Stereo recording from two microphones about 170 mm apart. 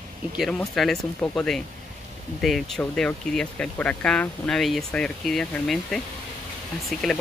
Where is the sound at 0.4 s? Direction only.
Centre (ahead or behind).